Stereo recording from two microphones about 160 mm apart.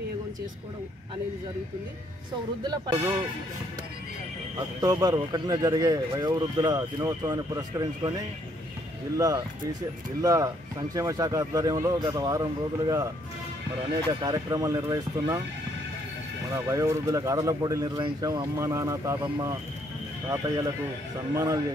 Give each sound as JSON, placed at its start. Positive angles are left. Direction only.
{"t": 2.6, "sound": "speech", "side_deg": -25}
{"t": 4.8, "sound": "speech", "side_deg": -25}
{"t": 9.1, "sound": "speech", "side_deg": -20}
{"t": 14.2, "sound": "speech", "side_deg": -25}
{"t": 16.5, "sound": "speech", "side_deg": -20}